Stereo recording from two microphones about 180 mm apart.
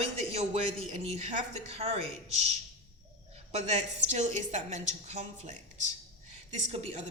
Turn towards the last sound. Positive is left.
turn(degrees=-35)  # may be behind; listen again after turning